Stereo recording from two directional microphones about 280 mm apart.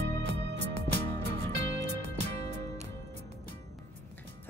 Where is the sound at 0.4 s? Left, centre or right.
Right.